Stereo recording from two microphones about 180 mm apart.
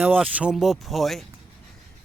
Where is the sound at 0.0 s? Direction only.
10° right (ahead or behind).